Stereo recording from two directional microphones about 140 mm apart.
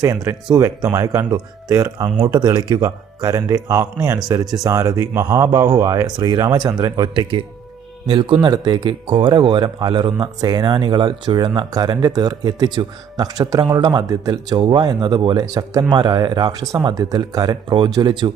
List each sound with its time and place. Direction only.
0.0 s speech: 20° right (ahead or behind)
2.4 s speech: 30° right (ahead or behind)